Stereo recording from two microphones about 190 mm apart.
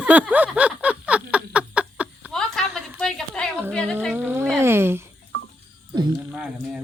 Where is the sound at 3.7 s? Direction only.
5° left (ahead or behind).